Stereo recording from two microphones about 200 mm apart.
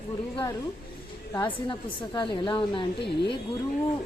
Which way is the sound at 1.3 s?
20° left (ahead or behind).